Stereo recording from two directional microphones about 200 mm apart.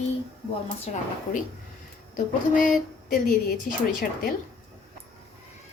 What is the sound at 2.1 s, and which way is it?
Speech, 40° left (ahead or behind).